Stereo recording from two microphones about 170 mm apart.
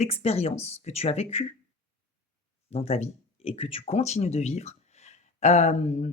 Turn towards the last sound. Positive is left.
turn(degrees=40)  # may be behind; listen again after turning